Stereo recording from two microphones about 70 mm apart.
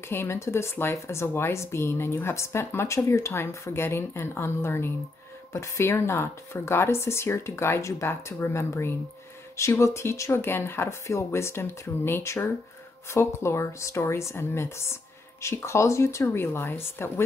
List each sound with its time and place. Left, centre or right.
0.1 s speech: left